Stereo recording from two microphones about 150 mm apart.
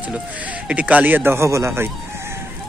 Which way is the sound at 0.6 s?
10° right (ahead or behind).